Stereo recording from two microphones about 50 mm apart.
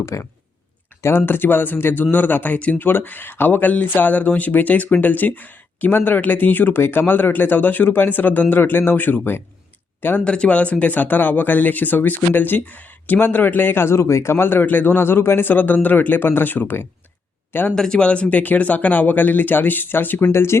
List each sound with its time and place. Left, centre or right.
0.1 s speech: left
1.0 s speech: left
2.8 s speech: left
10.2 s speech: left
17.7 s speech: centre; by 20.2 s left
20.3 s speech: left